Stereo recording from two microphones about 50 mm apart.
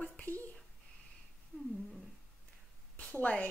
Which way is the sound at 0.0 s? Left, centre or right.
Left.